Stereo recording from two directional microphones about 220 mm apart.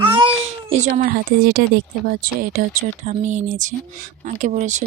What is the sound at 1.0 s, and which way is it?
Speech, 45° right (ahead or behind).